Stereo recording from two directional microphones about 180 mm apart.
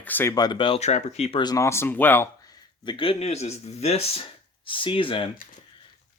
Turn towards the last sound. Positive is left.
turn(degrees=30)  # may be behind; listen again after turning